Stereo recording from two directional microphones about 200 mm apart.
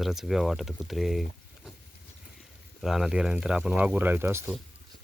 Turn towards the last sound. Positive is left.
turn(degrees=-10)  # may be behind; listen again after turning